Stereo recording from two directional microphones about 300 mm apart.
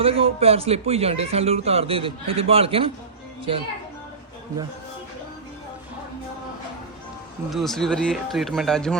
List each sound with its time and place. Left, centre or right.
0.0 s speech: centre
7.5 s speech: centre